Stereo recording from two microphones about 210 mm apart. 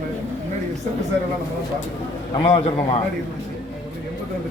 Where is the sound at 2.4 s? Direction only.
25° left (ahead or behind).